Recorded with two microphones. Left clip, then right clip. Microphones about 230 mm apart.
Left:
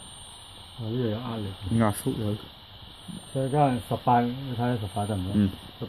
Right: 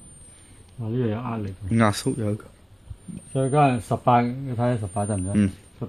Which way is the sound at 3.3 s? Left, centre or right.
Right.